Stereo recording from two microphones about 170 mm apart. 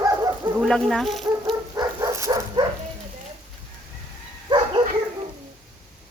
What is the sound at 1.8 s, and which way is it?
Dog, 15° right (ahead or behind).